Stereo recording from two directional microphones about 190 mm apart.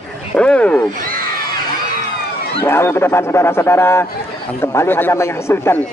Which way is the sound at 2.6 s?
10° left (ahead or behind).